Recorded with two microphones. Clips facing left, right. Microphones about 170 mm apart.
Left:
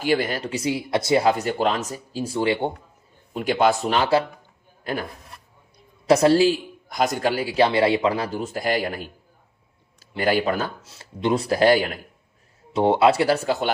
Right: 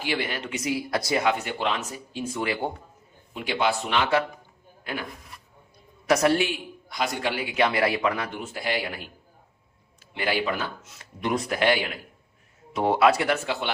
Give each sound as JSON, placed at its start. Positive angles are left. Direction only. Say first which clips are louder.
{"t": 0.0, "sound": "speech", "louder": "left 7 dB", "side_deg": 45}
{"t": 3.3, "sound": "speech", "louder": "left 6 dB", "side_deg": 45}
{"t": 6.1, "sound": "speech", "louder": "left 6 dB", "side_deg": 30}
{"t": 6.8, "sound": "speech", "louder": "left 6 dB", "side_deg": 45}
{"t": 10.2, "sound": "speech", "louder": "left 5 dB", "side_deg": 45}
{"t": 12.7, "sound": "speech", "louder": "left 3 dB", "side_deg": 30}